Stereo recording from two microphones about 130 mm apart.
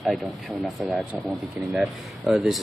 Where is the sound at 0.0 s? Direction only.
Centre (ahead or behind).